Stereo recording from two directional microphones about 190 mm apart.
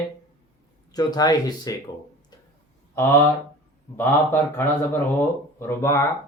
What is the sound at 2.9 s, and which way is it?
Speech, 10° left (ahead or behind).